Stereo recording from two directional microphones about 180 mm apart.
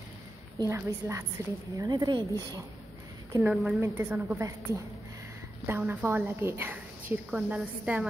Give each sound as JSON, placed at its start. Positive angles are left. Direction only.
{"t": 0.6, "sound": "a woman's voice", "side_deg": -15}
{"t": 3.3, "sound": "a woman's voice", "side_deg": -10}